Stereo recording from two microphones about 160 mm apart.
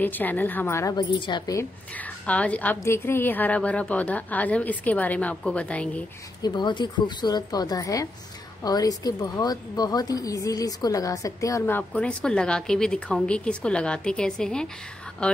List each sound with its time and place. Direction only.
0.0 s a woman's voice: 10° left (ahead or behind)
2.0 s a woman's voice: 10° left (ahead or behind)
6.4 s a woman's voice: 30° left (ahead or behind); by 15.4 s 5° left (ahead or behind)